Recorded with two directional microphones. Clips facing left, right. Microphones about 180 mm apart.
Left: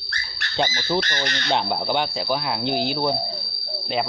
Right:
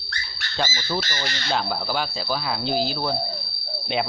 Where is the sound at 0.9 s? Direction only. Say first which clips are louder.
Left 4 dB; 5° right (ahead or behind).